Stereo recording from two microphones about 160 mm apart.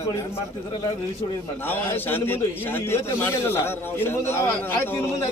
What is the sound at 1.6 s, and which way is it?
A man's voice, 10° left (ahead or behind).